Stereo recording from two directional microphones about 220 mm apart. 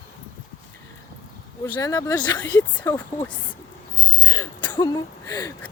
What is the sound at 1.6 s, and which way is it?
Speech, 15° left (ahead or behind).